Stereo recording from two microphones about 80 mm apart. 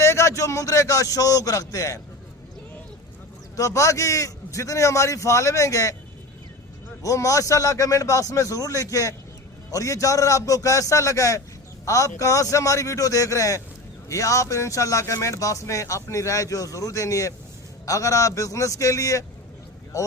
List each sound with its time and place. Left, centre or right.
0.0 s a man's voice: left
3.5 s speech: left
7.0 s a man's voice: left